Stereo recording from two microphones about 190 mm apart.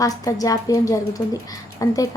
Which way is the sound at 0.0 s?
20° left (ahead or behind).